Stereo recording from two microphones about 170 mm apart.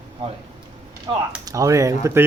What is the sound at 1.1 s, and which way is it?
Speech, 25° right (ahead or behind).